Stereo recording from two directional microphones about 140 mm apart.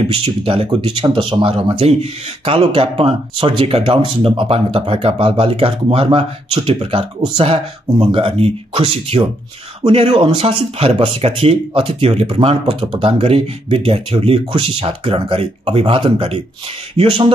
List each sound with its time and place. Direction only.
0.1 s speech: 45° right (ahead or behind)